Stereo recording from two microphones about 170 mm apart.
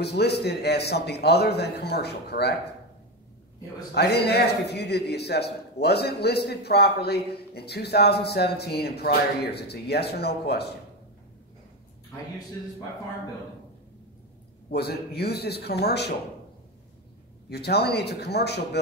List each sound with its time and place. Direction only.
0.0 s a man's voice: 75° left (ahead or behind)
3.9 s a man's voice: 70° left (ahead or behind)
14.7 s a man's voice: 70° left (ahead or behind)
17.5 s a man's voice: 70° left (ahead or behind)